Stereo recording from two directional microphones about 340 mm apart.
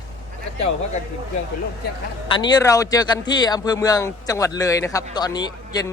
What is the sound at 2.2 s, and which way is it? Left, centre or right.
A man's voice, centre.